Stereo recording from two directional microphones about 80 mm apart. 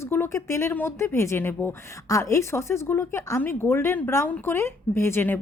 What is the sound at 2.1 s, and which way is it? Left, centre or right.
A woman's voice, left.